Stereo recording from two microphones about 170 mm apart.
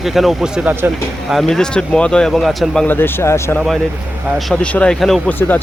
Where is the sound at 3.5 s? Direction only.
Centre (ahead or behind).